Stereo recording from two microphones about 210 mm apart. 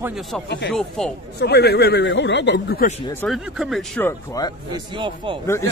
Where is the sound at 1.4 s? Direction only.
50° left (ahead or behind).